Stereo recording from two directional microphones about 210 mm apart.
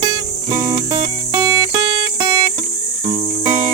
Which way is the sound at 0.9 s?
20° right (ahead or behind).